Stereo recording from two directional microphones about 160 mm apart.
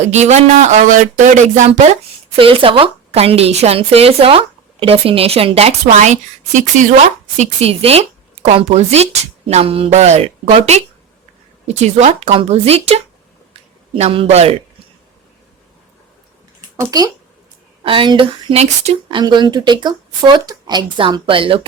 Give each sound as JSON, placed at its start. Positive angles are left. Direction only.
{"t": 0.0, "sound": "speech", "side_deg": -45}
{"t": 2.4, "sound": "a woman's voice", "side_deg": -35}
{"t": 16.6, "sound": "a sound", "side_deg": -25}
{"t": 17.8, "sound": "a woman's voice", "side_deg": -30}